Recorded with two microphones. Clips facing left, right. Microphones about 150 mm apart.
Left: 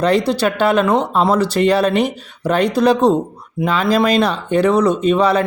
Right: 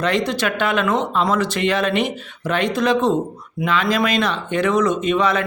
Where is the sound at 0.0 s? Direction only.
35° left (ahead or behind).